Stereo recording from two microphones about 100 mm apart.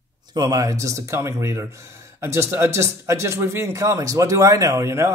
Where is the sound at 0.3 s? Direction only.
40° right (ahead or behind).